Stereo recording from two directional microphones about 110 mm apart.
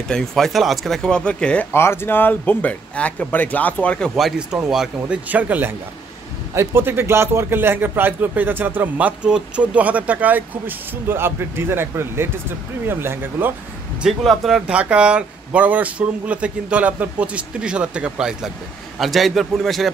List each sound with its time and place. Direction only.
0.1 s speech: 5° left (ahead or behind)
1.7 s speech: 20° left (ahead or behind)
4.2 s a man's voice: 5° right (ahead or behind)
14.0 s speech: centre (ahead or behind)